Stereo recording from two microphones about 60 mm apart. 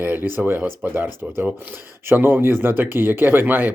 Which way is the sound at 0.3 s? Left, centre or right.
Right.